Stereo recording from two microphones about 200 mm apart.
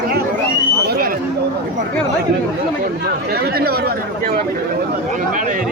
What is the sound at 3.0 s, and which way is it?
Speech, 50° right (ahead or behind).